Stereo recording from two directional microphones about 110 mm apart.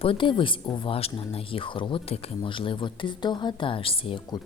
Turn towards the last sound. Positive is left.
turn(degrees=55)  # may be behind; listen again after turning